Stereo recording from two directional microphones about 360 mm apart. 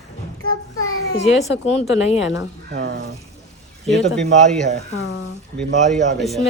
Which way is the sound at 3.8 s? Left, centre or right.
Centre.